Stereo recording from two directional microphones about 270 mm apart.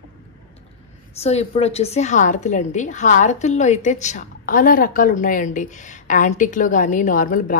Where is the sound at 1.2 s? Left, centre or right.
Left.